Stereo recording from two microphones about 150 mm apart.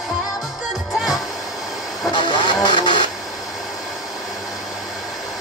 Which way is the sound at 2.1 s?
30° left (ahead or behind).